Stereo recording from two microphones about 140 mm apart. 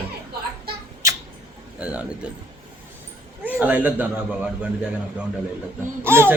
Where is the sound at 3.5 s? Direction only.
10° right (ahead or behind).